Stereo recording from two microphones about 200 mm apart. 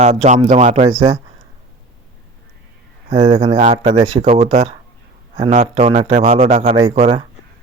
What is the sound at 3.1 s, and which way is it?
A man's voice, 35° right (ahead or behind).